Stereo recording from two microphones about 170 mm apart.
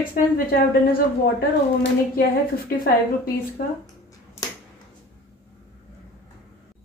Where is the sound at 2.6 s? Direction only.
60° left (ahead or behind).